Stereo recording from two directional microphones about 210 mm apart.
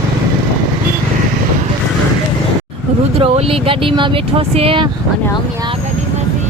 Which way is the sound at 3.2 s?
25° right (ahead or behind).